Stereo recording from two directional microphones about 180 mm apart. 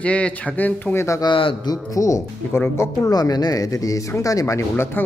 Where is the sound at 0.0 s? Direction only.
5° left (ahead or behind).